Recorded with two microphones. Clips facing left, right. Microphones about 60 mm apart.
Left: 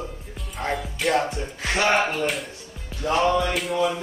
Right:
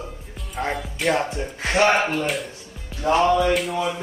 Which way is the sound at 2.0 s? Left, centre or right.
Centre.